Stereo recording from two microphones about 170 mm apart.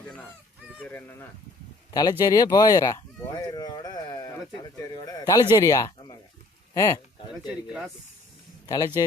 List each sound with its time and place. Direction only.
0.8 s speech: 10° left (ahead or behind)
1.9 s a man's voice: 20° left (ahead or behind)
8.6 s speech: 25° left (ahead or behind)